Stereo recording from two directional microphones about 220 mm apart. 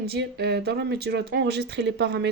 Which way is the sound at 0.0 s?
45° right (ahead or behind).